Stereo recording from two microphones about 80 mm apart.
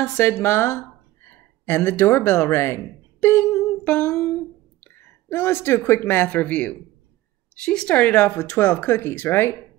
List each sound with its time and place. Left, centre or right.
0.0 s a woman's voice: left
3.8 s humming: centre
4.9 s a sound: left
5.9 s a woman's voice: left
8.4 s speech: left